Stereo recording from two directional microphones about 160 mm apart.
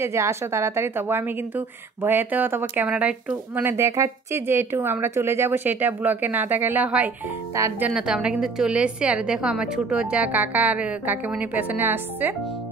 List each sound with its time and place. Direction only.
0.0 s speech: 15° right (ahead or behind)
7.5 s speech: 20° right (ahead or behind)
7.9 s speech: 5° right (ahead or behind)